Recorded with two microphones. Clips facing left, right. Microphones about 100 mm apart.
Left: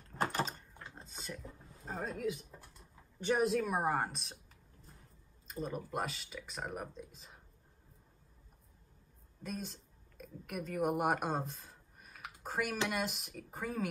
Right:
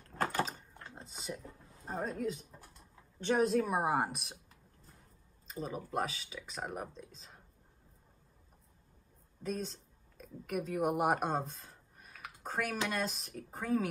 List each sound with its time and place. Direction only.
0.2 s a sound: 20° left (ahead or behind)
0.9 s a sound: 15° right (ahead or behind)
2.0 s speech: centre (ahead or behind)
3.6 s speech: 10° right (ahead or behind)
5.5 s speech: centre (ahead or behind)
9.4 s speech: centre (ahead or behind)